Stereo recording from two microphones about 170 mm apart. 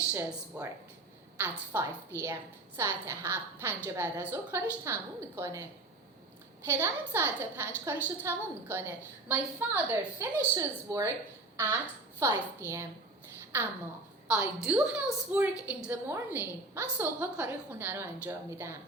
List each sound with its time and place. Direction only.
0.1 s a woman's voice: 10° right (ahead or behind)
6.7 s a woman's voice: 15° right (ahead or behind)
14.3 s a woman's voice: 10° right (ahead or behind)